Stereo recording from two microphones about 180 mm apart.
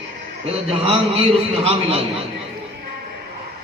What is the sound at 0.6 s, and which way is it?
A man's voice, 35° right (ahead or behind).